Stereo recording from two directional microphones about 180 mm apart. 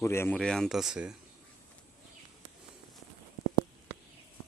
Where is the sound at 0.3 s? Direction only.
5° left (ahead or behind).